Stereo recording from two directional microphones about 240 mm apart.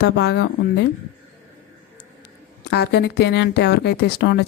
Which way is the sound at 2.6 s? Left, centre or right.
Left.